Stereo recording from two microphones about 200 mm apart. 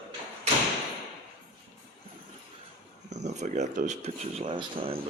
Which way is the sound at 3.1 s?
35° right (ahead or behind).